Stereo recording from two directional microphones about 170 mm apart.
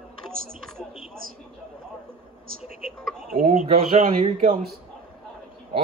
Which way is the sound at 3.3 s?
55° right (ahead or behind).